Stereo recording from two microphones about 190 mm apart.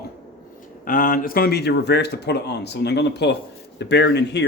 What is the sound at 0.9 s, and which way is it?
Speech, 45° left (ahead or behind).